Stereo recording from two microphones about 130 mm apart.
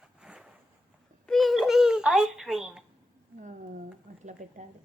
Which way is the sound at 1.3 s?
Centre (ahead or behind).